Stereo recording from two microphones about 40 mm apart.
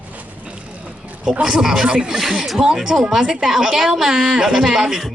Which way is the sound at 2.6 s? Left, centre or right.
Centre.